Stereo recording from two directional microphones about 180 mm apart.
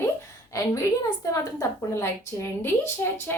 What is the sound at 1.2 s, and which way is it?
A woman's voice, 15° left (ahead or behind).